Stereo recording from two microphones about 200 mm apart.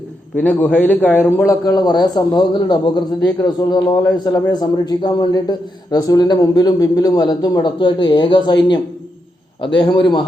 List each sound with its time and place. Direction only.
0.3 s a man's voice: 10° left (ahead or behind)
9.8 s a man's voice: 20° left (ahead or behind)